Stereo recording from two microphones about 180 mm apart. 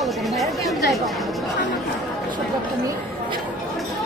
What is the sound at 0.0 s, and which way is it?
Chatter, centre (ahead or behind).